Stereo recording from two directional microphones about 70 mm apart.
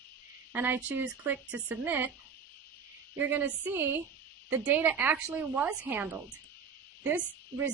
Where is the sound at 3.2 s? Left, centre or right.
Right.